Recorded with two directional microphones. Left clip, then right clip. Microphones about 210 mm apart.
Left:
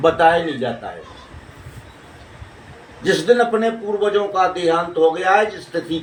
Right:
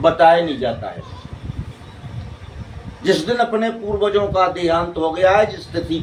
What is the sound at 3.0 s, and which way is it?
A man's voice, 20° right (ahead or behind).